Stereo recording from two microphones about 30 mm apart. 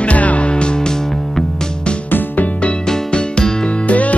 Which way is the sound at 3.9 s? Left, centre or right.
Left.